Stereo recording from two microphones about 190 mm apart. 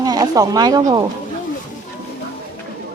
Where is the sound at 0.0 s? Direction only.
20° right (ahead or behind).